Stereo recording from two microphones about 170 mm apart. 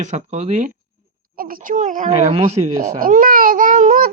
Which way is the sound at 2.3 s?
35° right (ahead or behind).